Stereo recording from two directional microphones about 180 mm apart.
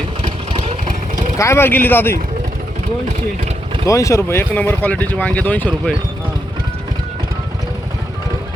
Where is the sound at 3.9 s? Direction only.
15° left (ahead or behind).